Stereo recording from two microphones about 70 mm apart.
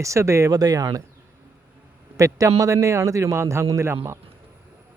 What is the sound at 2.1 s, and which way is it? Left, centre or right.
A man's voice, right.